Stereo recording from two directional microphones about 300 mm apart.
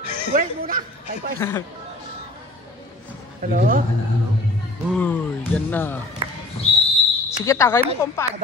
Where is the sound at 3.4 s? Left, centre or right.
Right.